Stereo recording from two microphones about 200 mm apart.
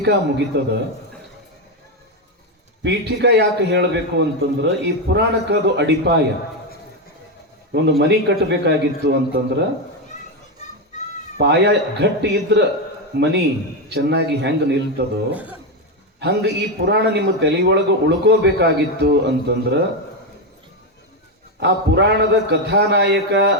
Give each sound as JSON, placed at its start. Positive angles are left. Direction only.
{"t": 0.0, "sound": "a man's voice", "side_deg": -60}
{"t": 2.8, "sound": "a man's voice", "side_deg": -60}
{"t": 7.7, "sound": "a man's voice", "side_deg": -60}
{"t": 11.3, "sound": "a man's voice", "side_deg": -60}
{"t": 15.3, "sound": "a man's voice", "side_deg": -5}
{"t": 16.2, "sound": "a man's voice", "side_deg": -60}
{"t": 21.6, "sound": "a man's voice", "side_deg": -60}